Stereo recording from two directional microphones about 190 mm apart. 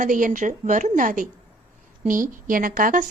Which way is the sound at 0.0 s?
45° right (ahead or behind).